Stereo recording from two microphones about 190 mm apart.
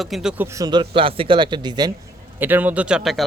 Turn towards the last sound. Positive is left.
turn(degrees=-5)  # may be behind; listen again after turning